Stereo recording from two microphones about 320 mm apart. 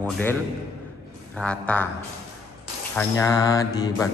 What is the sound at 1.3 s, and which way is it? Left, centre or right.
Speech, centre.